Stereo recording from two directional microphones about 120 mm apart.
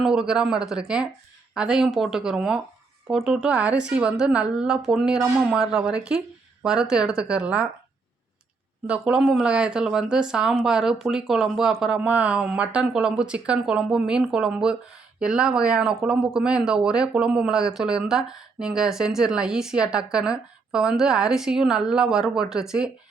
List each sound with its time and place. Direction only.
0.0 s speech: 5° right (ahead or behind)
8.9 s speech: 10° right (ahead or behind)